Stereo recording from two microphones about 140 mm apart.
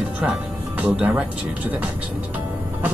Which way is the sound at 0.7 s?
10° right (ahead or behind).